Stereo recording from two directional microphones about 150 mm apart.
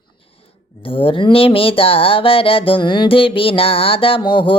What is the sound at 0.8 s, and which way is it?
Music, 35° left (ahead or behind).